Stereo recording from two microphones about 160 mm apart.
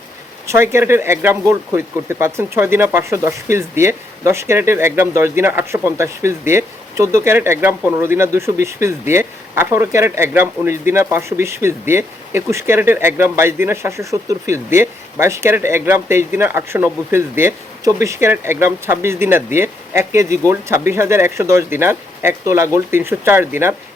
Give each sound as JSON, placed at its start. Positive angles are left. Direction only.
{"t": 0.4, "sound": "speech", "side_deg": -15}